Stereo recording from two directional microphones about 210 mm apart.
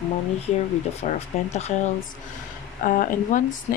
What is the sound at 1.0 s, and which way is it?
Speech, 30° left (ahead or behind).